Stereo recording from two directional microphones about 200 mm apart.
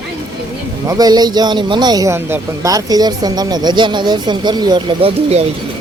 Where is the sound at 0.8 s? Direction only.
20° right (ahead or behind).